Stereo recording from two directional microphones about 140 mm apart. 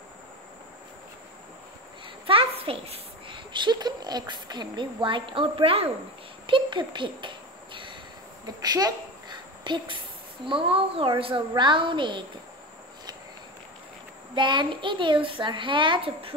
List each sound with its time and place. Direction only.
2.2 s a child's voice: 40° right (ahead or behind)
6.4 s insect: 35° right (ahead or behind)
8.5 s a sound: 30° right (ahead or behind)
10.4 s a woman's voice: 40° right (ahead or behind)
14.3 s a woman's voice: 35° right (ahead or behind)